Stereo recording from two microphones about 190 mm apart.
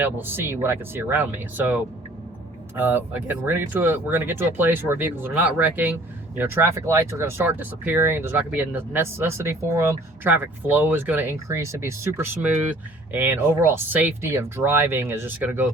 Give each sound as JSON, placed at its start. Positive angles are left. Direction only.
{"t": 0.0, "sound": "speech", "side_deg": -10}